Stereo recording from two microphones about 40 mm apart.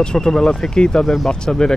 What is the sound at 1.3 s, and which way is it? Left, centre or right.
Speech, centre.